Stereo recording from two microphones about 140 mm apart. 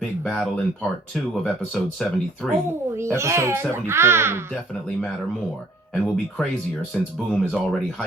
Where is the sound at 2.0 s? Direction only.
5° left (ahead or behind).